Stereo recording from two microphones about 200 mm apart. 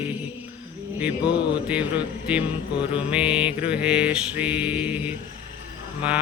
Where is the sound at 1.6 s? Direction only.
5° right (ahead or behind).